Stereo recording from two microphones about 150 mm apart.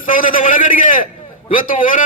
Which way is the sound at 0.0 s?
65° left (ahead or behind).